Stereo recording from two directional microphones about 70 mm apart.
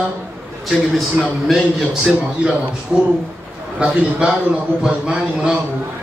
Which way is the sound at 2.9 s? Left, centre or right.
Centre.